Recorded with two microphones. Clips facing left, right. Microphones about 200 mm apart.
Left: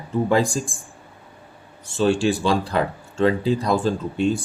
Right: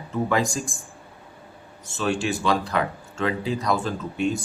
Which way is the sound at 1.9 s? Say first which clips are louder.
Left 6 dB; 30° left (ahead or behind).